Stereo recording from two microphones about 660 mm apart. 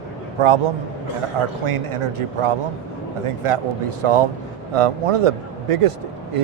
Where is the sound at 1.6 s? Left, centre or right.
Right.